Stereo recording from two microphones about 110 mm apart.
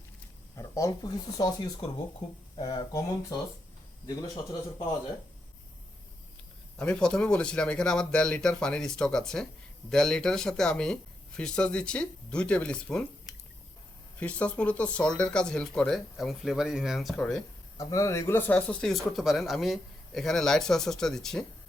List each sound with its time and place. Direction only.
0.5 s speech: 30° left (ahead or behind)
6.7 s speech: 5° left (ahead or behind)
17.7 s speech: 25° left (ahead or behind); by 21.4 s 5° left (ahead or behind)